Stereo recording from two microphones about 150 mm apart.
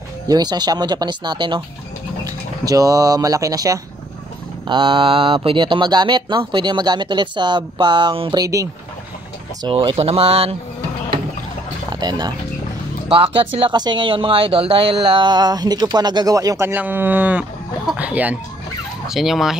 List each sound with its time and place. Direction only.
0.3 s speech: 25° right (ahead or behind)
4.6 s speech: 35° right (ahead or behind)
11.9 s speech: 30° right (ahead or behind); by 18.4 s 10° right (ahead or behind)
19.0 s fowl: centre (ahead or behind)